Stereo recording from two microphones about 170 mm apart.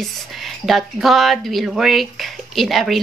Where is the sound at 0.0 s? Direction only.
Centre (ahead or behind).